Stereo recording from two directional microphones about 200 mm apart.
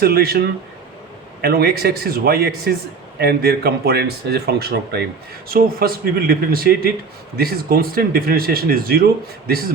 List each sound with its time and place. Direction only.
0.0 s speech: 50° right (ahead or behind)